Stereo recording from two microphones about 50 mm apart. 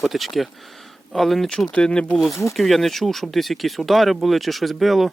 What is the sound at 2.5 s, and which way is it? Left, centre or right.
Speech, centre.